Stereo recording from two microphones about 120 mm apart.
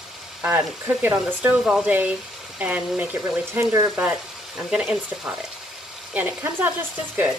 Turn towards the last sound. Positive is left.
turn(degrees=-15)  # may be behind; listen again after turning